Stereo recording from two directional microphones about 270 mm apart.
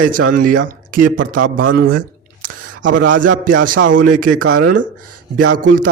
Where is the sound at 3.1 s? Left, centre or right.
Right.